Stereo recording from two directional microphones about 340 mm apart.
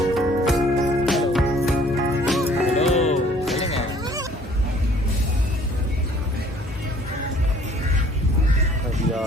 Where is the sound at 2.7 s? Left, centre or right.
Centre.